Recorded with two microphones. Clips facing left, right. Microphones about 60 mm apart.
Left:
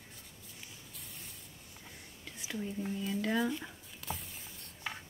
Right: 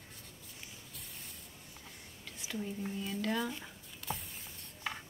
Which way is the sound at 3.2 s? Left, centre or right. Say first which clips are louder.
Left 3 dB; centre.